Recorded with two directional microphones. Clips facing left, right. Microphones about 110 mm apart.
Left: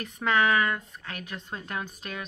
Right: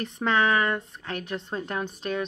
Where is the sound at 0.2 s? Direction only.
25° right (ahead or behind).